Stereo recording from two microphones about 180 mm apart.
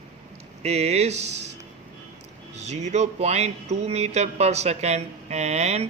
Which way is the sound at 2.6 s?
40° right (ahead or behind).